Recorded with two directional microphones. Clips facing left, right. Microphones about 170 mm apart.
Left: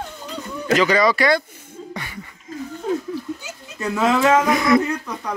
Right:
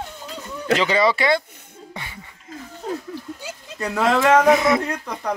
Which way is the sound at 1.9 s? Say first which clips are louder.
Left 2 dB; 20° right (ahead or behind).